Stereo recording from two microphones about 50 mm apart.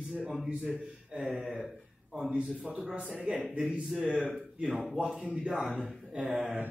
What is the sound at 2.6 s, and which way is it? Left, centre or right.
Speech, right.